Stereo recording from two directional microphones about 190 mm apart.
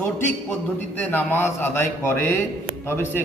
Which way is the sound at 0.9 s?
10° left (ahead or behind).